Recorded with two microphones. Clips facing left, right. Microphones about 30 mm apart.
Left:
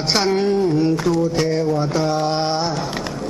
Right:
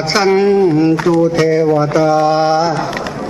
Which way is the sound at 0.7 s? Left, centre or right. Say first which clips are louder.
Right 6 dB; right.